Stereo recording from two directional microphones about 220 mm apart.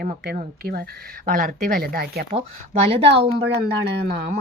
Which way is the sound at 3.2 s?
25° right (ahead or behind).